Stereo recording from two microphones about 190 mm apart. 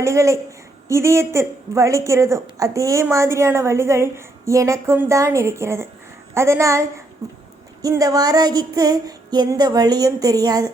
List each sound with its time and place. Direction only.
0.0 s a woman's voice: 15° right (ahead or behind)
7.8 s female singing: 20° right (ahead or behind)